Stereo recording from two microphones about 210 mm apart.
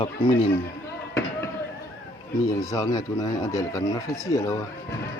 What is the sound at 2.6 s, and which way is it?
Speech, 15° left (ahead or behind).